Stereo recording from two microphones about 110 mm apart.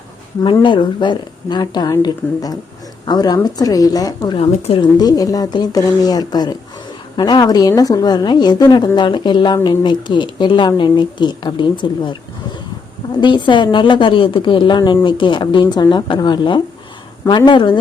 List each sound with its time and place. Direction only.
0.6 s speech: 45° left (ahead or behind)
4.4 s speech: 55° left (ahead or behind)
4.9 s speech: 35° left (ahead or behind)
13.2 s speech: 45° left (ahead or behind)